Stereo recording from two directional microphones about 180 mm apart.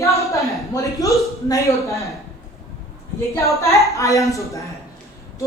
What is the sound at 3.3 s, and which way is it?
Speech, 15° left (ahead or behind).